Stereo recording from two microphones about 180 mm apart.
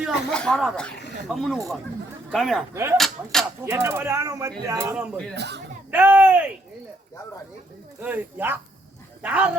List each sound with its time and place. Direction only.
0.0 s speech: 5° left (ahead or behind)
2.7 s speech: 15° right (ahead or behind)
5.3 s speech: 70° right (ahead or behind)
5.9 s speech: 10° right (ahead or behind)
8.0 s speech: 10° right (ahead or behind)